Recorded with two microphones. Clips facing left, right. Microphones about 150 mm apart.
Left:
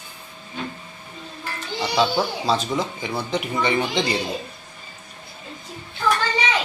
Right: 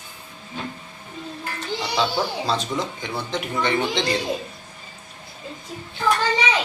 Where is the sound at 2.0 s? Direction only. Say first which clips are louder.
Left 3 dB; 5° left (ahead or behind).